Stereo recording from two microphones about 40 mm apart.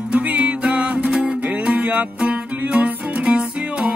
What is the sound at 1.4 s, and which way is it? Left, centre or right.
Music, right.